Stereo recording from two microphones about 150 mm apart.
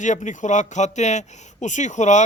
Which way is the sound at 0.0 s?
55° left (ahead or behind).